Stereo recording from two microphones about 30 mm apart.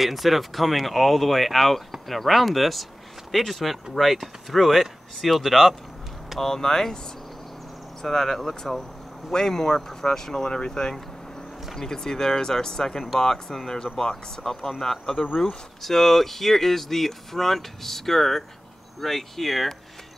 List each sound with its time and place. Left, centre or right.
0.0 s speech: centre
6.4 s speech: centre
8.0 s speech: centre